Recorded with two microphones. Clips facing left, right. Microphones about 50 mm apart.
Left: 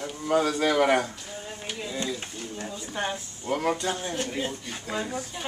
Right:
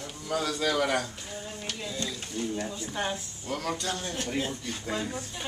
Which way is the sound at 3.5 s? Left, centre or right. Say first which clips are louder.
Left 5 dB; left.